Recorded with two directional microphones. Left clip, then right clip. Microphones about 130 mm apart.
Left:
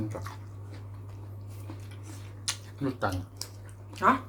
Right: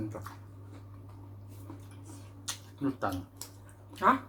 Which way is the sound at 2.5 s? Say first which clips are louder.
Left 2 dB; 40° left (ahead or behind).